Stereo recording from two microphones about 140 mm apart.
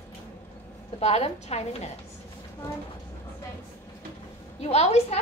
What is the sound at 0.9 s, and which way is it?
Speech, 50° left (ahead or behind).